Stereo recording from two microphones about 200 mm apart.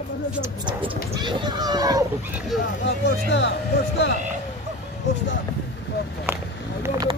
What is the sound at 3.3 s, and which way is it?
Speech, 60° left (ahead or behind).